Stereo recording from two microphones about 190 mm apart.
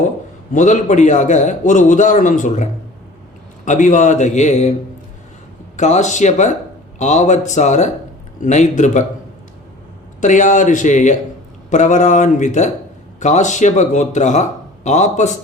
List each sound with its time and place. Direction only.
0.5 s a man's voice: 40° left (ahead or behind)
3.7 s a man's voice: 40° left (ahead or behind)
5.7 s a man's voice: 40° left (ahead or behind)
10.2 s a man's voice: 40° left (ahead or behind)